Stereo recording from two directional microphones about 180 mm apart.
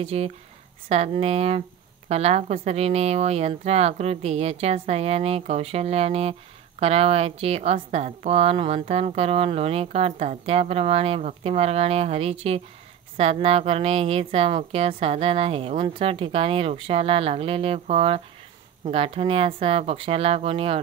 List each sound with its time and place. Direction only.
0.0 s a woman's voice: 35° right (ahead or behind)